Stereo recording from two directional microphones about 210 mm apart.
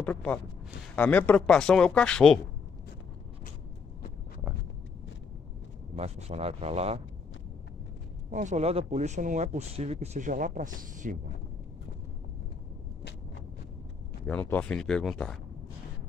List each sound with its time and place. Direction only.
0.0 s speech: 5° left (ahead or behind)
5.9 s speech: 30° right (ahead or behind)
8.3 s speech: 35° right (ahead or behind)
14.2 s speech: 10° left (ahead or behind)